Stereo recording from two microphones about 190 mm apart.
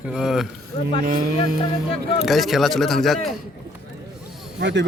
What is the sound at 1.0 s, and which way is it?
Speech, 50° right (ahead or behind).